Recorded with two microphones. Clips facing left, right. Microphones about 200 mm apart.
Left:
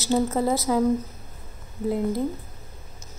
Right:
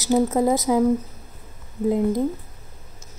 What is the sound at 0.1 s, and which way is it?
Speech, 15° right (ahead or behind).